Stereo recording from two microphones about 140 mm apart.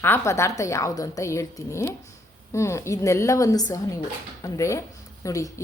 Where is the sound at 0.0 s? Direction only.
15° left (ahead or behind).